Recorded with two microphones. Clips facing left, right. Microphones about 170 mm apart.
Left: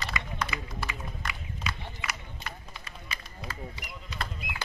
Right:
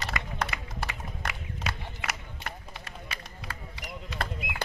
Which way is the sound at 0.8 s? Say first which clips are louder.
Right 1 dB; 75° right (ahead or behind).